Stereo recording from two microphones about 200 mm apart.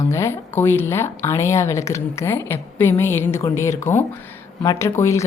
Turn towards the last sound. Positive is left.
turn(degrees=15)  # may be behind; listen again after turning